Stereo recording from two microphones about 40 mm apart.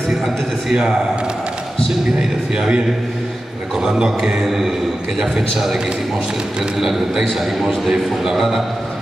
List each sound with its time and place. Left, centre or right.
0.7 s a man's voice: centre
2.1 s a man's voice: centre
6.8 s a man's voice: centre